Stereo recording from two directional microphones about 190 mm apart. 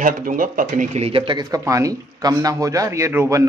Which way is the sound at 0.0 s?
45° right (ahead or behind).